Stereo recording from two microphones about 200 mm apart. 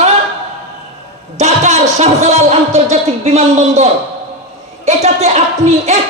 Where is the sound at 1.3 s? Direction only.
35° right (ahead or behind).